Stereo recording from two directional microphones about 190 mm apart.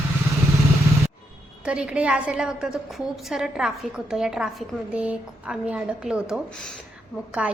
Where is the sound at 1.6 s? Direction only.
5° right (ahead or behind).